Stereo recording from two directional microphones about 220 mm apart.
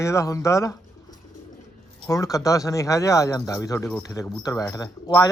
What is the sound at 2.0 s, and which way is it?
Speech, 15° left (ahead or behind).